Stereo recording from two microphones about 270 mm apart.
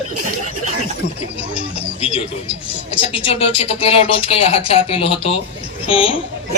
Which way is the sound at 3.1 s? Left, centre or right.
Centre.